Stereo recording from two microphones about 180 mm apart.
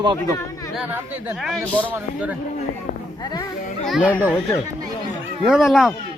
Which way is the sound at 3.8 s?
5° right (ahead or behind).